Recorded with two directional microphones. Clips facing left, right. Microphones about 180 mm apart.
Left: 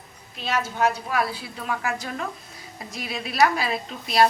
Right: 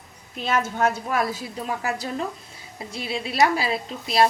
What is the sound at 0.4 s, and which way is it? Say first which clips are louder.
A woman's voice: right 1 dB; 50° right (ahead or behind).